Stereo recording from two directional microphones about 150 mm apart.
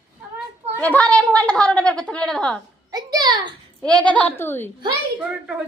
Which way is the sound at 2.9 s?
25° right (ahead or behind).